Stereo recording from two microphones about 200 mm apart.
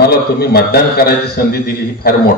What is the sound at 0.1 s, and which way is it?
Speech, 50° left (ahead or behind).